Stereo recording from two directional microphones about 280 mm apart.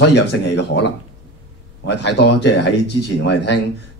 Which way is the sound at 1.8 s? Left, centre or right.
Left.